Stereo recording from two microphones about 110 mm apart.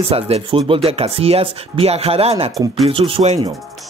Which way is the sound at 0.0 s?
60° right (ahead or behind).